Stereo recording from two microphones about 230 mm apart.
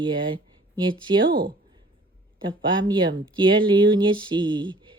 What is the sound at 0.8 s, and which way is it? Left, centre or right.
Speech, centre.